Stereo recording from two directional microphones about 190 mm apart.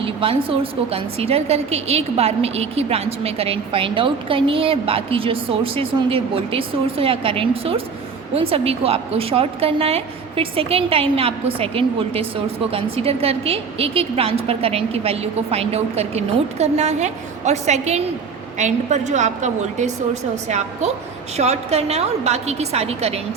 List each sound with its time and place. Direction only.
0.0 s a woman's voice: 30° right (ahead or behind)